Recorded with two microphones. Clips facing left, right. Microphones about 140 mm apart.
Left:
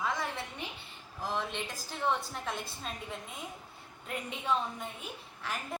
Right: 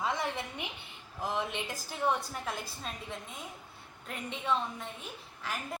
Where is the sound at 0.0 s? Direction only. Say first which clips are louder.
Right 1 dB; 20° right (ahead or behind).